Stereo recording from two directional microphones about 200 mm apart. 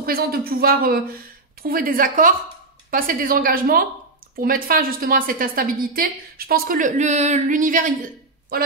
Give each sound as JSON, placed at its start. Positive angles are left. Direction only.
{"t": 0.0, "sound": "a woman's voice", "side_deg": -50}